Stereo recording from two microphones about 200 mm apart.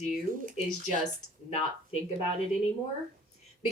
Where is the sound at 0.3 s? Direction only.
45° right (ahead or behind).